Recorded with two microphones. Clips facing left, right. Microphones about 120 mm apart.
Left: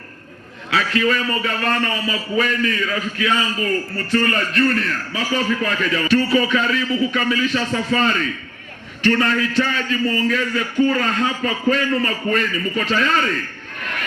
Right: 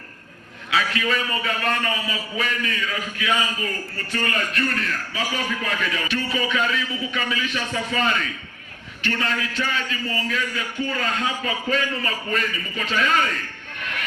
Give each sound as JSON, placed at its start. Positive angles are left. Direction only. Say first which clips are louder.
{"t": 0.7, "sound": "a man's voice", "louder": "left 4 dB", "side_deg": 40}